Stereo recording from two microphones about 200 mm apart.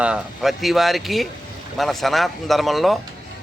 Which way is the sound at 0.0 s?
5° right (ahead or behind).